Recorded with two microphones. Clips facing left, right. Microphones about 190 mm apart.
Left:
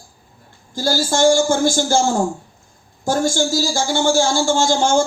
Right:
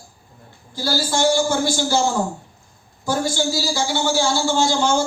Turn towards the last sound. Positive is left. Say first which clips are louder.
# left 3 dB
turn(degrees=45)  # may be behind; listen again after turning